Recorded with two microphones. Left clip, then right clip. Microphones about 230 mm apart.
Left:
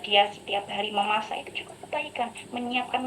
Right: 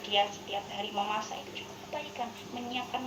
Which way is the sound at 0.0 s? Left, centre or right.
Left.